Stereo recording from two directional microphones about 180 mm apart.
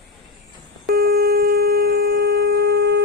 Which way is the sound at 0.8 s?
60° right (ahead or behind).